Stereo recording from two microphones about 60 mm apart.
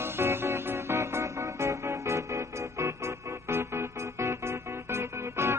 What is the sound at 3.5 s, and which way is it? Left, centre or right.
Music, right.